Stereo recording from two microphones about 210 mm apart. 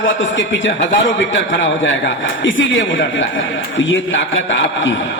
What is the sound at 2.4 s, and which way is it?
A man's voice, 60° left (ahead or behind).